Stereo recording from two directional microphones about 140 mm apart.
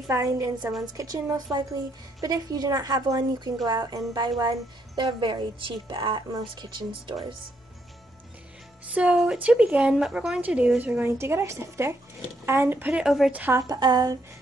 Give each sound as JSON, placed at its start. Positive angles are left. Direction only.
{"t": 0.1, "sound": "a woman's voice", "side_deg": -20}
{"t": 8.9, "sound": "a woman's voice", "side_deg": -5}
{"t": 13.7, "sound": "a woman's voice", "side_deg": -30}